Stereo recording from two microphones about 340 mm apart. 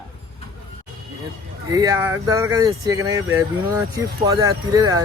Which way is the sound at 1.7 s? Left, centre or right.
Centre.